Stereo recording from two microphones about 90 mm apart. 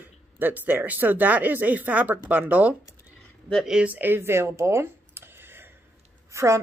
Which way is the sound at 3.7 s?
20° right (ahead or behind).